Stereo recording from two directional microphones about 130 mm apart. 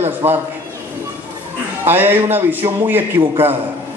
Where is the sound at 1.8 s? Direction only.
15° right (ahead or behind).